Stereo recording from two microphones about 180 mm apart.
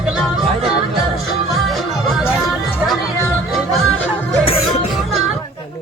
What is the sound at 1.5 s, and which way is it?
Music, centre (ahead or behind).